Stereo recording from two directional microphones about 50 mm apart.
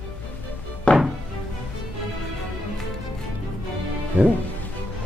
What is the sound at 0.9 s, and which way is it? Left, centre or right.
Music, left.